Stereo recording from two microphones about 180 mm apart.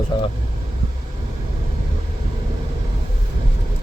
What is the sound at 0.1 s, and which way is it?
Vehicle, 25° left (ahead or behind).